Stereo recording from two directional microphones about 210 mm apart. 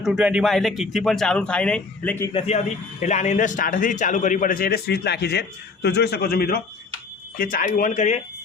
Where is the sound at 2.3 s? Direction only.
30° left (ahead or behind).